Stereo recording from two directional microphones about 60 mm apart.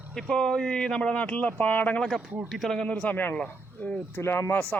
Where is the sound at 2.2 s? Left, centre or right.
Centre.